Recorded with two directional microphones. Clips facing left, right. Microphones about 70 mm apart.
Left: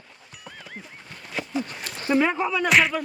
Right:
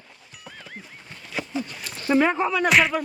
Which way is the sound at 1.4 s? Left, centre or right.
Centre.